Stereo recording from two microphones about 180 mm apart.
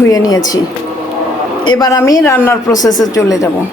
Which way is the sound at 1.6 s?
25° left (ahead or behind).